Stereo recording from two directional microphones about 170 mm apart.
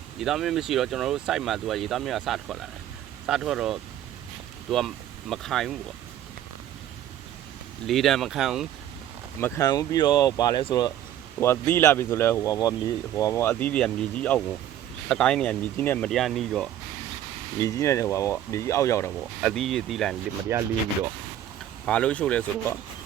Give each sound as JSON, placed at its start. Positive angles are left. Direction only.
{"t": 0.2, "sound": "speech", "side_deg": 0}
{"t": 7.9, "sound": "speech", "side_deg": 0}
{"t": 9.4, "sound": "speech", "side_deg": 20}
{"t": 11.3, "sound": "speech", "side_deg": 15}
{"t": 17.6, "sound": "speech", "side_deg": 20}
{"t": 19.4, "sound": "speech", "side_deg": 0}
{"t": 20.5, "sound": "speech", "side_deg": -15}
{"t": 21.8, "sound": "speech", "side_deg": 5}